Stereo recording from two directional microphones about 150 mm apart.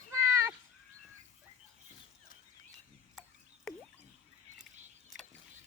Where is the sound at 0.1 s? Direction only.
20° right (ahead or behind).